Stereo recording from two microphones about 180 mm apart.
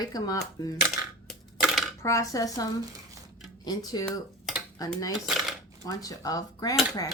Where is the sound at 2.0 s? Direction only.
15° left (ahead or behind).